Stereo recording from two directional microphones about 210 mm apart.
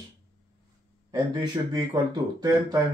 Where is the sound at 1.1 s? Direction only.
20° right (ahead or behind).